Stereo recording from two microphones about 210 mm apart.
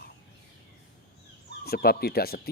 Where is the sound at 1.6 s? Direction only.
45° left (ahead or behind).